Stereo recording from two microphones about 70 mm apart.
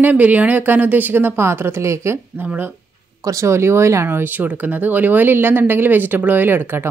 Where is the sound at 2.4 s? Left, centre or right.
Right.